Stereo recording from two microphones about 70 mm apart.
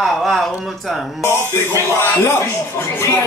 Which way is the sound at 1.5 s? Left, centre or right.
Left.